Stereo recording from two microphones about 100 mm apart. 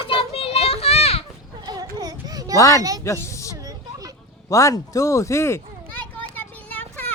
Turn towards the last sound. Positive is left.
turn(degrees=15)  # may be behind; listen again after turning